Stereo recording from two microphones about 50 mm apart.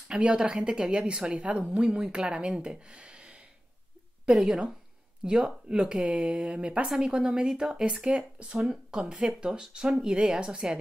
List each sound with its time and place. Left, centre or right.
0.1 s speech: centre